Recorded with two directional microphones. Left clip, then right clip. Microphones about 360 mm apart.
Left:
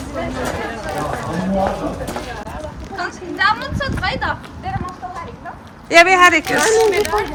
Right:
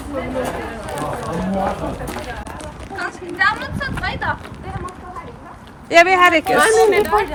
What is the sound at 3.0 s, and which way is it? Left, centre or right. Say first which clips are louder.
A woman's voice: left 1 dB; left.